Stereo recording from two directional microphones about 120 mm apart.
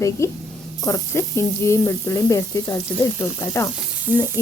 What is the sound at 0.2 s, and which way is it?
Frying, 25° left (ahead or behind).